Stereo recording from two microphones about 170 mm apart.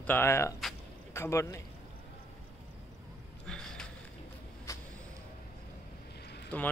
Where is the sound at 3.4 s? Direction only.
5° left (ahead or behind).